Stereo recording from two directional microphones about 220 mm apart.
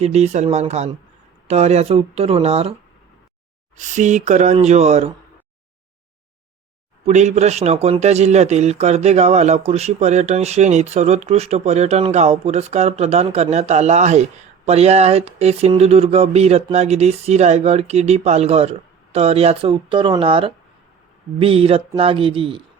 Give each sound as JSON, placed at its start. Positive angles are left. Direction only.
{"t": 0.0, "sound": "a man's voice", "side_deg": -30}
{"t": 3.8, "sound": "speech", "side_deg": -35}
{"t": 7.0, "sound": "a man's voice", "side_deg": -30}